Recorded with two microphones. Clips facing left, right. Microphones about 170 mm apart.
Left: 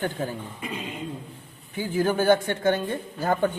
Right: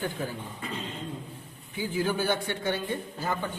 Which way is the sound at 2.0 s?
50° left (ahead or behind).